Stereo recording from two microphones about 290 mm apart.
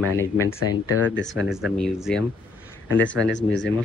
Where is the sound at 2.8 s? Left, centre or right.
Left.